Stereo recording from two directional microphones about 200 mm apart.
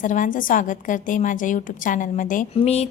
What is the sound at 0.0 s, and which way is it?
A woman's voice, 40° left (ahead or behind).